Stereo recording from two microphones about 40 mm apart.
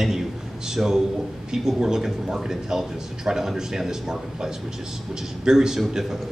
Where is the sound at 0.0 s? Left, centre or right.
Centre.